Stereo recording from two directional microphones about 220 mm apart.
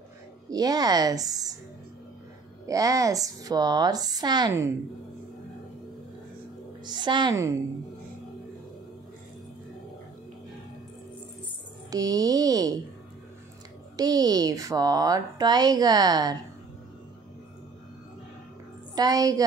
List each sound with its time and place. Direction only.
0.5 s a woman's voice: 15° right (ahead or behind)
2.6 s a woman's voice: 15° right (ahead or behind)
6.8 s a woman's voice: 20° right (ahead or behind)
11.9 s a woman's voice: 15° right (ahead or behind)
13.9 s a woman's voice: 15° right (ahead or behind)
18.9 s a woman's voice: 15° right (ahead or behind)